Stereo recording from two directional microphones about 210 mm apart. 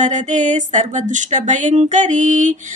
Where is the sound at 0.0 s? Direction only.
35° right (ahead or behind).